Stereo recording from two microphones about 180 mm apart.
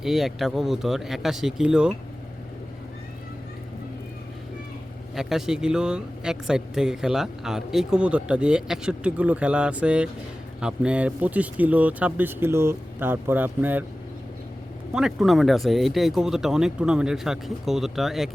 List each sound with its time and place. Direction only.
0.0 s speech: centre (ahead or behind)
5.1 s speech: centre (ahead or behind)
14.9 s speech: centre (ahead or behind)